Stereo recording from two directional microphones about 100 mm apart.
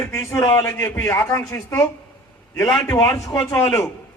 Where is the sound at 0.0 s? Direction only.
25° left (ahead or behind).